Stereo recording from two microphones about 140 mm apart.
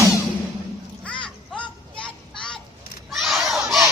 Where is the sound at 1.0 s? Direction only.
10° left (ahead or behind).